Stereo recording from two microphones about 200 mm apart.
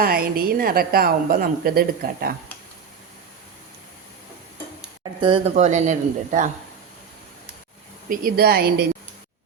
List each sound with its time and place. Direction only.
0.0 s a woman's voice: 50° right (ahead or behind)
5.2 s speech: 30° right (ahead or behind)
8.1 s a woman's voice: 50° right (ahead or behind)